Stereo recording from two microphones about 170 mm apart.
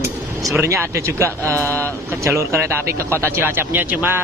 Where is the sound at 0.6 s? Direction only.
15° right (ahead or behind).